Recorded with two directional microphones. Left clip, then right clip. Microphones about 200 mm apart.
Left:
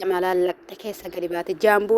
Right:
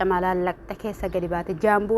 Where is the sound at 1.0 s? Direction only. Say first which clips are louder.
Right 4 dB; 60° left (ahead or behind).